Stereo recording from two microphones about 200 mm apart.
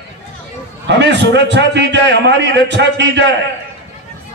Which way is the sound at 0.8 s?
60° right (ahead or behind).